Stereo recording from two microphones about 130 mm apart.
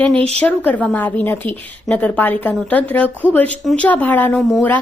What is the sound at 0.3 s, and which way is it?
Speech, 10° left (ahead or behind).